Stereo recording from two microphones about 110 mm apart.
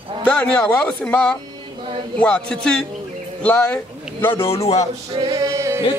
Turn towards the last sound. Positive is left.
turn(degrees=-30)  # may be behind; listen again after turning